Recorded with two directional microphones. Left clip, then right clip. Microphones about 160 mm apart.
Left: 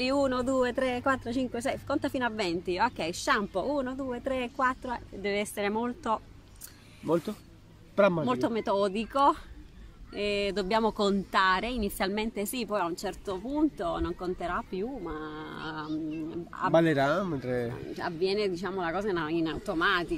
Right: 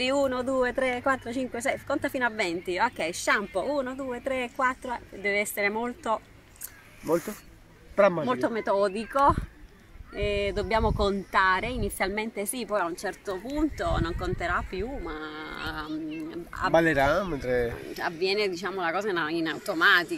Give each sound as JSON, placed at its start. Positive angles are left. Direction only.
{"t": 0.0, "sound": "a woman's voice", "side_deg": 20}
{"t": 7.9, "sound": "a woman's voice", "side_deg": 0}
{"t": 17.9, "sound": "a woman's voice", "side_deg": 15}